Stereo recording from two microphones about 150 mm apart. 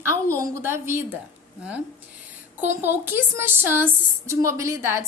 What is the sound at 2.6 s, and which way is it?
Speech, 15° right (ahead or behind).